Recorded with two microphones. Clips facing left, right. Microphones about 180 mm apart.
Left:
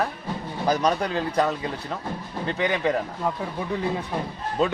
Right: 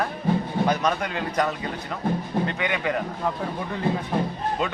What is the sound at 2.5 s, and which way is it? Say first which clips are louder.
Speech: left 3 dB; 35° left (ahead or behind).